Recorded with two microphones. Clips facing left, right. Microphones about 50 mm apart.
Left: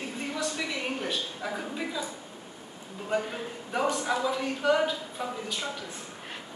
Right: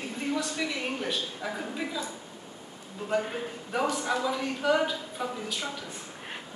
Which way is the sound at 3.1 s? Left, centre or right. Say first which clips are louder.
Right 1 dB; centre.